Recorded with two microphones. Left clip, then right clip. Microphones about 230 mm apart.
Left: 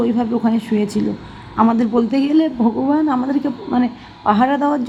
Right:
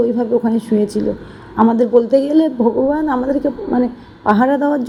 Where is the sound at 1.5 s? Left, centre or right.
Centre.